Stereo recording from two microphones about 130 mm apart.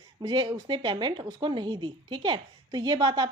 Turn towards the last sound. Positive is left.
turn(degrees=-35)  # may be behind; listen again after turning